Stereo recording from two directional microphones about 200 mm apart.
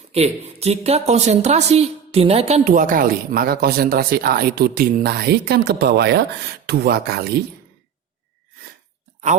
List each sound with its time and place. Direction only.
0.1 s a woman's voice: 30° right (ahead or behind); by 7.4 s 50° right (ahead or behind)